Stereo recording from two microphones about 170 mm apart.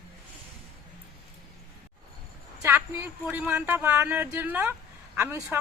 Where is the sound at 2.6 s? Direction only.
15° right (ahead or behind).